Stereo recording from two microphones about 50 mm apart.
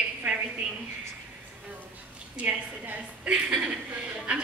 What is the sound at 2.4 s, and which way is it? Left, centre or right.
Speech, right.